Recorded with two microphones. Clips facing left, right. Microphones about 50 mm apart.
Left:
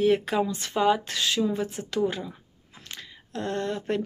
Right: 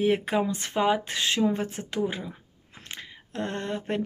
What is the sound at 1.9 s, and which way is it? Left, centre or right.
Speech, right.